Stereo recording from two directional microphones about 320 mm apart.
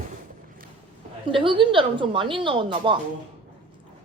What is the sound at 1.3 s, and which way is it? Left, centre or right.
A woman's voice, centre.